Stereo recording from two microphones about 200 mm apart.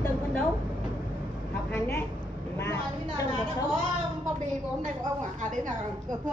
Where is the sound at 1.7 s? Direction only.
10° left (ahead or behind).